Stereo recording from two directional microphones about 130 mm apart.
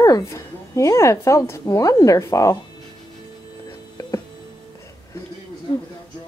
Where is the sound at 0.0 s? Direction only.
25° left (ahead or behind).